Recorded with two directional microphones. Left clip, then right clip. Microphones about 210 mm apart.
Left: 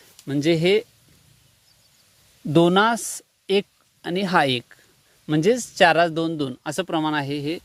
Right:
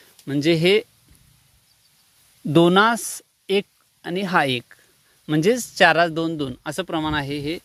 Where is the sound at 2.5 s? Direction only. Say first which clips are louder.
Right 2 dB; 5° right (ahead or behind).